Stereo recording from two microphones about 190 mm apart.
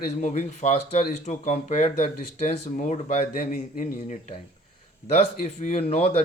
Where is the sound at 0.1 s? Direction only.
40° left (ahead or behind).